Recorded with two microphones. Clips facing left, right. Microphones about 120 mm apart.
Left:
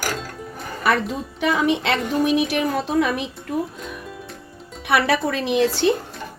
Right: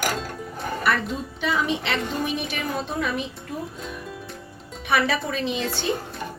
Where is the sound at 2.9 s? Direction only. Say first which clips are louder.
Left 7 dB; 90° left.